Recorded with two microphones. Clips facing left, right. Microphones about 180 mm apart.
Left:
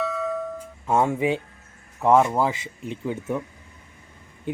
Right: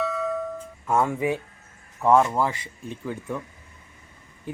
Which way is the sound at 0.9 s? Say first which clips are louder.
Left 2 dB; 25° left (ahead or behind).